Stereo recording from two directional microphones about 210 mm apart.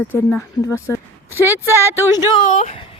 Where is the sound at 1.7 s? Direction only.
10° right (ahead or behind).